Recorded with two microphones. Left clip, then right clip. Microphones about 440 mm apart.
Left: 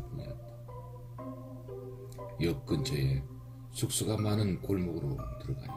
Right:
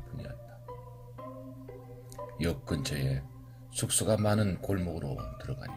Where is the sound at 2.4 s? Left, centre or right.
Centre.